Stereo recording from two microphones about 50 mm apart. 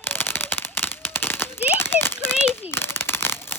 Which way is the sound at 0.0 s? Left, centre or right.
Left.